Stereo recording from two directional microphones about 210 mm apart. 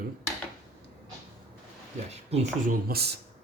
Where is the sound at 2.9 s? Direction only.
50° right (ahead or behind).